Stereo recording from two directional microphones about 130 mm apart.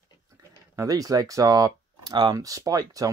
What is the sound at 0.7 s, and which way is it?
Speech, 25° right (ahead or behind).